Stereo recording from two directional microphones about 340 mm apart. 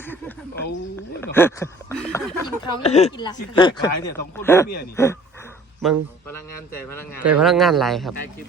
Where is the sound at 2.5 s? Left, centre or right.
Centre.